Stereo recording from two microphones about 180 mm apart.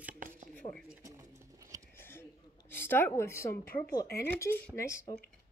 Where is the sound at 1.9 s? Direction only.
10° left (ahead or behind).